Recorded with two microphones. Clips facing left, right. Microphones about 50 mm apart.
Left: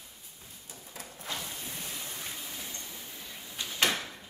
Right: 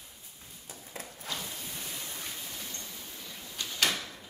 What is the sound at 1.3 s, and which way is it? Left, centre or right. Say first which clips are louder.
Printer: left 1 dB; left.